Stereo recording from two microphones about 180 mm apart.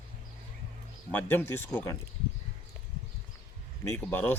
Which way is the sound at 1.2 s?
10° left (ahead or behind).